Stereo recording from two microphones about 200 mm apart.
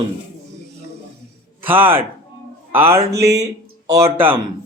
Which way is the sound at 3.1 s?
55° right (ahead or behind).